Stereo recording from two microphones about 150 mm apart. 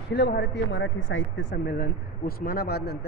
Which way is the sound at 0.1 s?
90° left.